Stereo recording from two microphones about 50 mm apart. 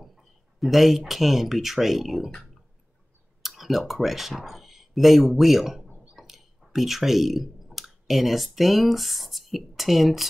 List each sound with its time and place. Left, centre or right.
0.0 s speech: centre
3.4 s speech: centre